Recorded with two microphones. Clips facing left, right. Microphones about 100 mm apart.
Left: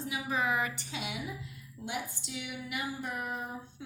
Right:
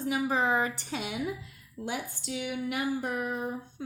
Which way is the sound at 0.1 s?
35° right (ahead or behind).